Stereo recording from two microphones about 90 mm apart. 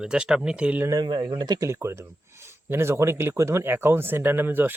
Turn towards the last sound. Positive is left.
turn(degrees=-20)  # may be behind; listen again after turning